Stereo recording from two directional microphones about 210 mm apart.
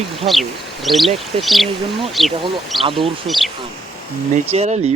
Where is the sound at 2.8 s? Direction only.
25° right (ahead or behind).